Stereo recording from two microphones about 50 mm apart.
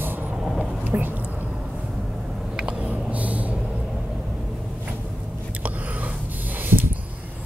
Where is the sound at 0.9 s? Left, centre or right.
Right.